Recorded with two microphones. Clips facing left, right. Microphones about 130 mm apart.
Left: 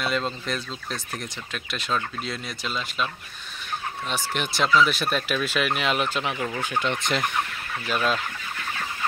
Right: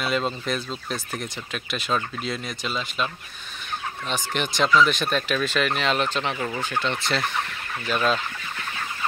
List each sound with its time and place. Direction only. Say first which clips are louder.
0.0 s speech: right 2 dB; 5° right (ahead or behind)
4.1 s speech: right 2 dB; 5° left (ahead or behind)
6.3 s speech: right 1 dB; 5° right (ahead or behind)
6.6 s fowl: even; 15° left (ahead or behind)
7.8 s speech: right 2 dB; 5° left (ahead or behind)